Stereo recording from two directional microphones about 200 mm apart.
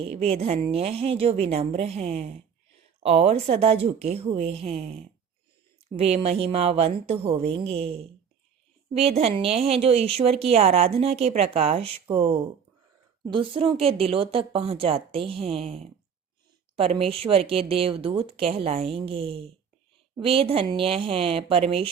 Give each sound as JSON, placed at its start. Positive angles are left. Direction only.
{"t": 0.0, "sound": "a woman's voice", "side_deg": -30}
{"t": 6.0, "sound": "a woman's voice", "side_deg": -30}